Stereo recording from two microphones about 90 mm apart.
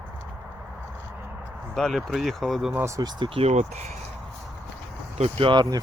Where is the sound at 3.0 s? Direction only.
50° right (ahead or behind).